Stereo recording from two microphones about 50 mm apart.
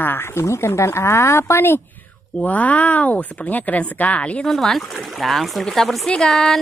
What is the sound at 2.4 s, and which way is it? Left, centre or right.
Speech, left.